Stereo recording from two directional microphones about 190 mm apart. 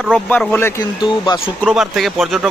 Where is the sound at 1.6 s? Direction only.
Centre (ahead or behind).